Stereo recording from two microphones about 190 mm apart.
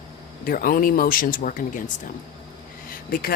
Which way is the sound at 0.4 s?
50° left (ahead or behind).